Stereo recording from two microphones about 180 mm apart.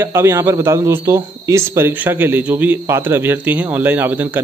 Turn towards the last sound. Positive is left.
turn(degrees=-10)  # may be behind; listen again after turning